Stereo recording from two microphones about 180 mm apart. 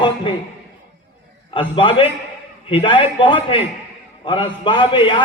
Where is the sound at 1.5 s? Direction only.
30° left (ahead or behind).